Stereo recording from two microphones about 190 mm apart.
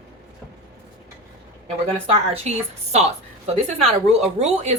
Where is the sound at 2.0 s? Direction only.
30° right (ahead or behind).